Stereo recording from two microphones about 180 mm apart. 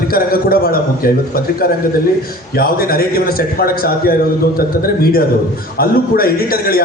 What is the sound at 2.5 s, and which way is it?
A man's voice, 55° left (ahead or behind).